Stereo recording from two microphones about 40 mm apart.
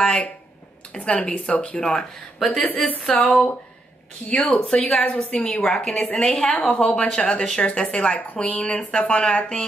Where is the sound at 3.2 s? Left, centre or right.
Left.